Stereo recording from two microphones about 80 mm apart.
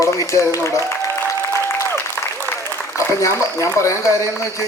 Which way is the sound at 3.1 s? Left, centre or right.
Left.